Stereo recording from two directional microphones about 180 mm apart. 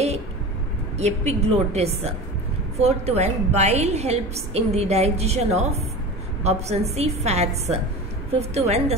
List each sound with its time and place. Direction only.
0.9 s a woman's voice: 35° right (ahead or behind)